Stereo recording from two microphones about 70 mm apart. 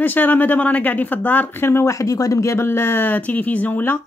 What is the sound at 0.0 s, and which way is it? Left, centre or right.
Speech, left.